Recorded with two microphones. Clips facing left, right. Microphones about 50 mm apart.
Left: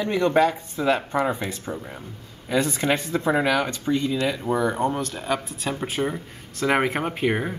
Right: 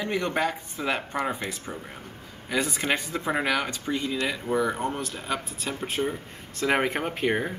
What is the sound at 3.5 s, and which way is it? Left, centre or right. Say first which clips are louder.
Speech: left 5 dB; centre.